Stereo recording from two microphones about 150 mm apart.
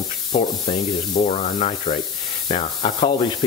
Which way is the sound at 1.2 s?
45° left (ahead or behind).